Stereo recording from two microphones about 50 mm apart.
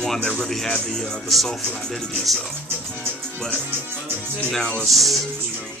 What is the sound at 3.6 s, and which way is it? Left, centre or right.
Speech, right.